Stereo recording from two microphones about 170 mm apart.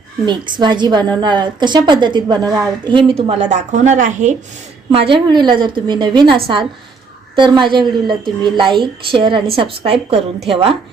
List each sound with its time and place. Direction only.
0.3 s a woman's voice: 25° right (ahead or behind)
3.1 s a woman's voice: 35° right (ahead or behind)
4.9 s a woman's voice: 30° right (ahead or behind)